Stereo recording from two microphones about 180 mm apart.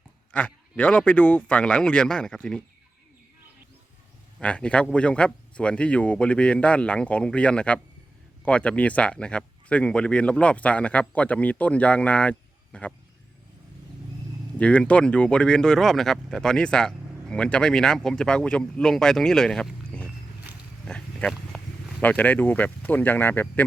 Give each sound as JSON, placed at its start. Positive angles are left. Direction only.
{"t": 0.3, "sound": "speech", "side_deg": 5}
{"t": 4.4, "sound": "speech", "side_deg": 5}
{"t": 14.6, "sound": "speech", "side_deg": 5}
{"t": 20.8, "sound": "a sound", "side_deg": 5}
{"t": 22.1, "sound": "speech", "side_deg": 10}